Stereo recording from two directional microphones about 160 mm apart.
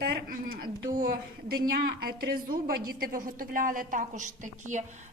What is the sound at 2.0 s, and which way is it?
A woman's voice, 75° right (ahead or behind).